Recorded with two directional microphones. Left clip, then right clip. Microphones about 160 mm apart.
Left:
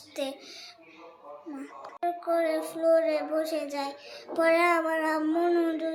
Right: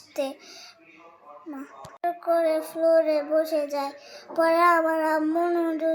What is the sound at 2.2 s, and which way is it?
Child singing, 30° right (ahead or behind).